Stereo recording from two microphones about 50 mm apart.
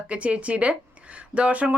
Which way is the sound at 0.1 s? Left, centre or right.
Right.